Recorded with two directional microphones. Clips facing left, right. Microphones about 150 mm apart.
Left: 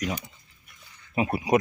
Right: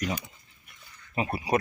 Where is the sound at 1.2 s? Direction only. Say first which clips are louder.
Left 4 dB; 15° left (ahead or behind).